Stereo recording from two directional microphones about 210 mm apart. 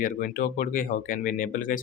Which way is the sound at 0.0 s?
40° left (ahead or behind).